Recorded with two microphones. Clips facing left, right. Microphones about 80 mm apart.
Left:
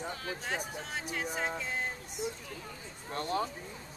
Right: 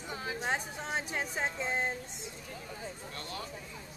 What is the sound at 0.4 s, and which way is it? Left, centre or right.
Speech, right.